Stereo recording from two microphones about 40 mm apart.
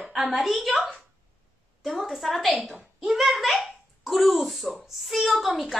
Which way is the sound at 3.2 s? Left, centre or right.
Centre.